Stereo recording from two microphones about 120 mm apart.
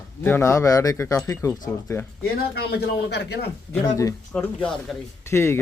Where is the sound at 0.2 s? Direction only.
15° left (ahead or behind).